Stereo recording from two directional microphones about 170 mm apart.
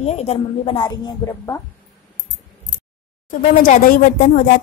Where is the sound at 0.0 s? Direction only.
40° left (ahead or behind); by 1.6 s 15° left (ahead or behind).